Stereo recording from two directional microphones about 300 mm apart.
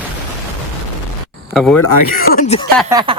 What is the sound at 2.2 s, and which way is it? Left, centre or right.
Speech, left.